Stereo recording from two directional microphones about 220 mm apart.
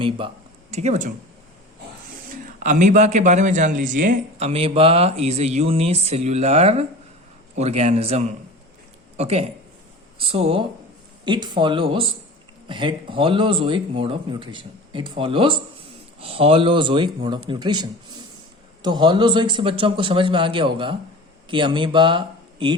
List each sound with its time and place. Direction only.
0.7 s speech: 30° right (ahead or behind)
2.3 s a man's voice: 35° right (ahead or behind)